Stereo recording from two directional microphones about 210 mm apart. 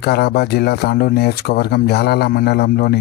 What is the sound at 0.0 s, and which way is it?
Speech, 50° left (ahead or behind).